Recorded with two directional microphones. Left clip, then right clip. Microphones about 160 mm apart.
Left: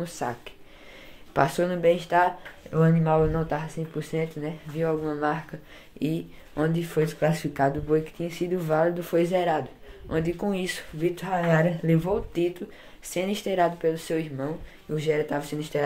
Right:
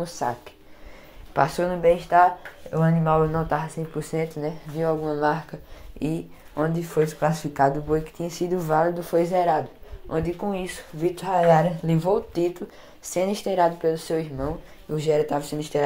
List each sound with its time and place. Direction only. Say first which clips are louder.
0.2 s speech: right 4 dB; 20° left (ahead or behind)
1.3 s speech: right 1 dB; 30° left (ahead or behind); by 5.2 s 10° left (ahead or behind)
6.0 s speech: right 1 dB; 35° right (ahead or behind)
6.7 s speech: right 3 dB; 15° left (ahead or behind)
8.2 s speech: right 2 dB; 5° left (ahead or behind)
9.0 s speech: right 3 dB; 20° left (ahead or behind)
10.4 s speech: even; 30° left (ahead or behind)
11.0 s speech: right 5 dB; centre (ahead or behind)
15.0 s speech: right 4 dB; 5° right (ahead or behind)